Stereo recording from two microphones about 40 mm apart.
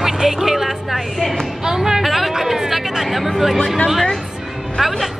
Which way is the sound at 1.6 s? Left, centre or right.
Centre.